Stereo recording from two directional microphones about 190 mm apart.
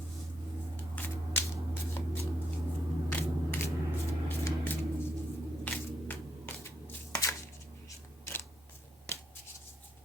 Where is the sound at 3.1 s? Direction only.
10° left (ahead or behind).